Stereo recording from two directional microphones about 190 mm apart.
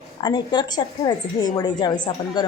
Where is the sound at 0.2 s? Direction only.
20° left (ahead or behind).